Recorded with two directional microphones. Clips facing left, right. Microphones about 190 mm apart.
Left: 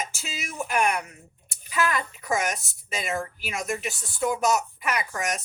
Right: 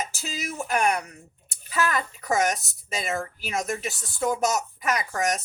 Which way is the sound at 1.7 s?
40° right (ahead or behind).